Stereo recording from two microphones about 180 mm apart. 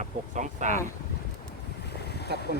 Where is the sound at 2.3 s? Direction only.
65° right (ahead or behind).